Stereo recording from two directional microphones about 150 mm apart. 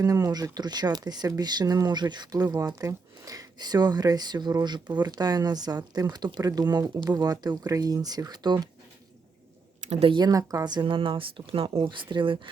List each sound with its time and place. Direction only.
0.0 s speech: 25° right (ahead or behind)
9.9 s speech: 35° right (ahead or behind)